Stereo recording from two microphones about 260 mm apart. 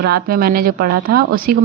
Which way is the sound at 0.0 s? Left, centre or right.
Right.